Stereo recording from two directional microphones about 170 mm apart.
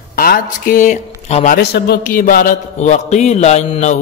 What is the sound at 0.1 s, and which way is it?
Speech, 60° left (ahead or behind).